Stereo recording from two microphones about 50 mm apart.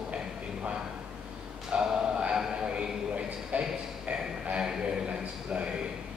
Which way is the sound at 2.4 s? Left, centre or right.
Centre.